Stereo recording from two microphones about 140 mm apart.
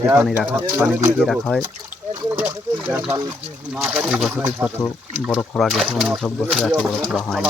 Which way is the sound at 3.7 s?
5° right (ahead or behind).